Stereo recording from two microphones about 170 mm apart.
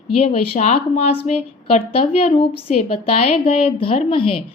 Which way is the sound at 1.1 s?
40° left (ahead or behind).